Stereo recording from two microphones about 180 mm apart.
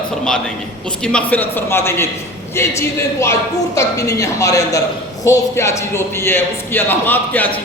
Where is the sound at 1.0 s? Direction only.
5° left (ahead or behind).